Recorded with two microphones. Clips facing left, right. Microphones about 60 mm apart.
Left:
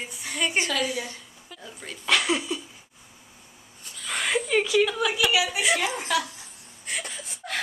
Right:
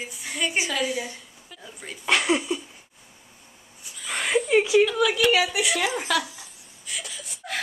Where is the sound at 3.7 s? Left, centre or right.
Centre.